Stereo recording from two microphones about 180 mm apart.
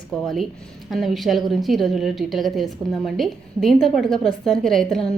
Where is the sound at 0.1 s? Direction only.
Centre (ahead or behind).